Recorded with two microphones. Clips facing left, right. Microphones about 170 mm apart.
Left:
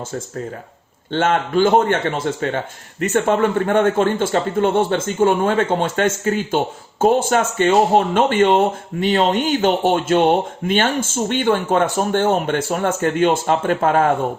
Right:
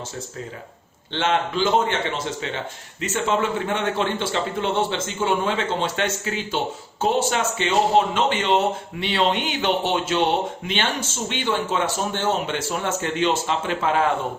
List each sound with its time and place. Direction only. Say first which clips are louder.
1.1 s speech: left 5 dB; 50° left (ahead or behind)